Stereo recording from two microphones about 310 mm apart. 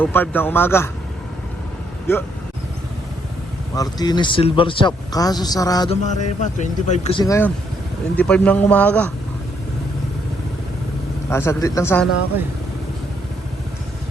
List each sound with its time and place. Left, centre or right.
0.0 s speech: centre
2.1 s speech: centre
3.8 s a man's voice: centre
11.3 s speech: centre